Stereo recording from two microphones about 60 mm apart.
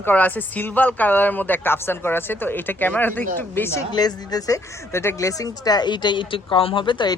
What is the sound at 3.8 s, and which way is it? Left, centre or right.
Speech, left.